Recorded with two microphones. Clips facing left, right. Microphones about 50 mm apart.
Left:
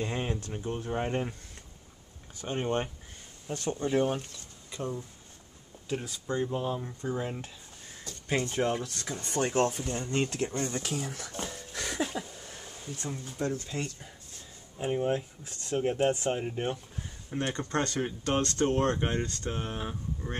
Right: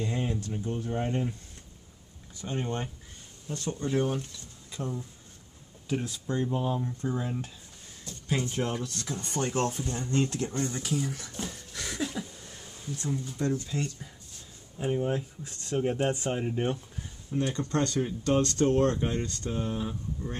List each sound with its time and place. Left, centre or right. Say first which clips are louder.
0.0 s speech: right 1 dB; left
2.3 s speech: left 3 dB; left
4.6 s speech: even; centre
6.8 s speech: right 2 dB; centre
7.2 s speech: right 1 dB; left
8.3 s speech: left 1 dB; left
8.5 s speech: left 2 dB; left
10.8 s speech: right 3 dB; left
12.2 s a sound: even; centre
13.4 s speech: right 2 dB; centre
14.8 s speech: even; centre
15.7 s speech: left 1 dB; centre
17.3 s speech: right 2 dB; left